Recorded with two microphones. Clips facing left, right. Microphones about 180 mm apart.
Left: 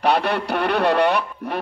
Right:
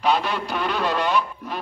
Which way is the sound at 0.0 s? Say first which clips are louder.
Left 3 dB; 65° left (ahead or behind).